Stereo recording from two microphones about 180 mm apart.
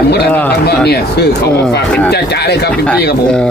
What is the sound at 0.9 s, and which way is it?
Speech, 65° left (ahead or behind).